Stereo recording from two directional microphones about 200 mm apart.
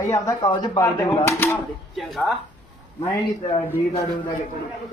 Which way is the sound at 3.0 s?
15° left (ahead or behind).